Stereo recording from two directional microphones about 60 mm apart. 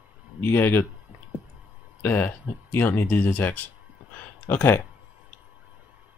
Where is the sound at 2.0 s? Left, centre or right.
Left.